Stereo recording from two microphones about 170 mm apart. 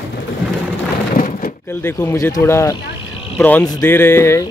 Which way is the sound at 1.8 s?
15° left (ahead or behind).